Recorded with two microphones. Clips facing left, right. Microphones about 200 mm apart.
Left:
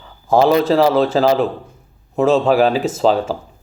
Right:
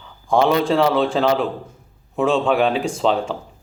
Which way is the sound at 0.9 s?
Centre (ahead or behind).